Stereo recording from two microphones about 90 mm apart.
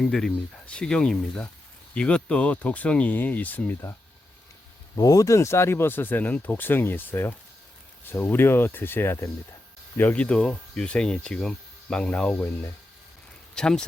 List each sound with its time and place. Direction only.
0.0 s speech: 5° left (ahead or behind); by 3.9 s 25° left (ahead or behind)
4.9 s speech: 40° left (ahead or behind)
10.0 s speech: 15° left (ahead or behind)
13.6 s speech: 10° left (ahead or behind)